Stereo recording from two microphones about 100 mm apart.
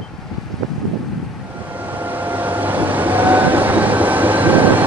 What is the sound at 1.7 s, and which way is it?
Vehicle, 20° right (ahead or behind).